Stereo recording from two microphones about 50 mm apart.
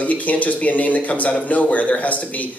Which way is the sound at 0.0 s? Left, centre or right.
Left.